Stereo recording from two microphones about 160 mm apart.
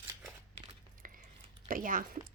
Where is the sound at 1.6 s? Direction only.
60° right (ahead or behind).